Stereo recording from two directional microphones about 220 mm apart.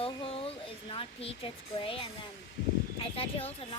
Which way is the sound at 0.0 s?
25° left (ahead or behind).